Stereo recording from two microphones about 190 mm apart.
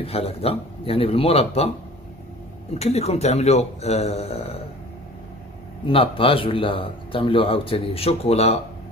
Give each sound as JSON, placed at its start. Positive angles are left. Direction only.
{"t": 0.0, "sound": "a man's voice", "side_deg": 30}
{"t": 2.8, "sound": "a man's voice", "side_deg": 35}
{"t": 5.9, "sound": "speech", "side_deg": 25}